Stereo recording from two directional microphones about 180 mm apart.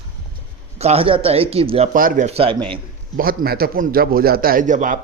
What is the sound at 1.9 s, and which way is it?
Speech, 50° right (ahead or behind).